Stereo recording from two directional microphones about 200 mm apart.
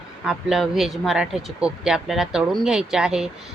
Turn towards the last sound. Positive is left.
turn(degrees=-5)  # may be behind; listen again after turning